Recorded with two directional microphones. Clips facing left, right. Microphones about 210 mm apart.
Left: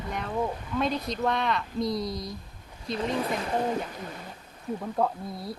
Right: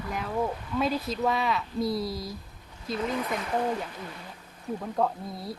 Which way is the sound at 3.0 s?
30° left (ahead or behind).